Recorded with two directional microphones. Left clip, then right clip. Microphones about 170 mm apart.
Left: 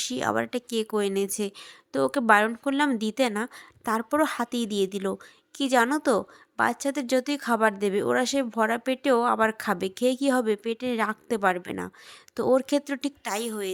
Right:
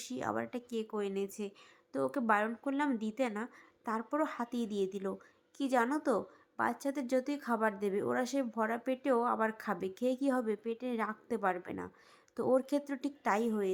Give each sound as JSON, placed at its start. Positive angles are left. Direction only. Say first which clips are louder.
{"t": 0.0, "sound": "speech", "louder": "left 11 dB", "side_deg": 30}